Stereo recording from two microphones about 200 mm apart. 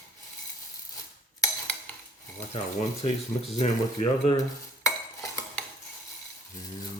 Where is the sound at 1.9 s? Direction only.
5° left (ahead or behind).